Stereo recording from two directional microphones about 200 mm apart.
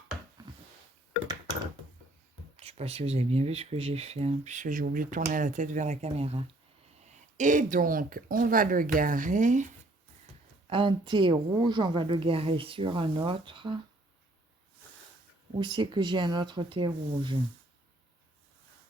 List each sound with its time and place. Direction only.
2.6 s speech: 30° right (ahead or behind)
10.7 s a woman's voice: 25° right (ahead or behind)
15.5 s a woman's voice: 25° right (ahead or behind)